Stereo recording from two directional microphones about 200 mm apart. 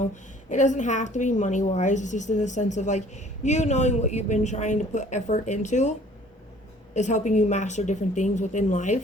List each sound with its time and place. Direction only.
0.5 s speech: 35° left (ahead or behind)
6.9 s speech: 35° left (ahead or behind)